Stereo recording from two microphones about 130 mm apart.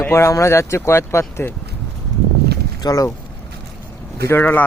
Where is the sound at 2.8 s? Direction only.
25° left (ahead or behind).